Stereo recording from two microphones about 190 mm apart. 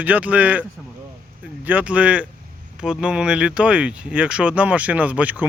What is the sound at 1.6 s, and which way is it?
Speech, 10° right (ahead or behind).